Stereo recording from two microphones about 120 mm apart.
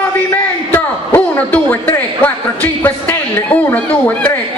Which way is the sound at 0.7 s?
15° left (ahead or behind).